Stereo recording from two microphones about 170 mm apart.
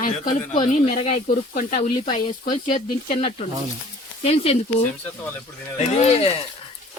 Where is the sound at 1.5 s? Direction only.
55° left (ahead or behind).